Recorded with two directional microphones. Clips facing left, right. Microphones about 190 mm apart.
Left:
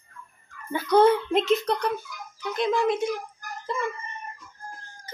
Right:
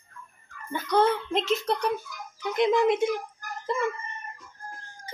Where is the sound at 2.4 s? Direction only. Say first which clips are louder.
Right 2 dB; 20° right (ahead or behind).